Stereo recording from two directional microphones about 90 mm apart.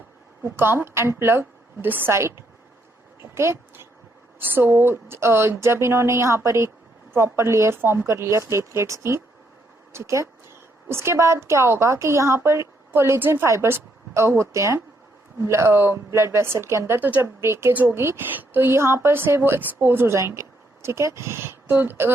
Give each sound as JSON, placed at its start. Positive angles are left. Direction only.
{"t": 0.4, "sound": "a woman's voice", "side_deg": -25}
{"t": 3.2, "sound": "a sound", "side_deg": -30}
{"t": 4.4, "sound": "a woman's voice", "side_deg": -25}